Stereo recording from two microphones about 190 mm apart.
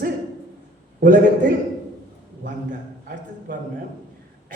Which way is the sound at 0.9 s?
45° right (ahead or behind).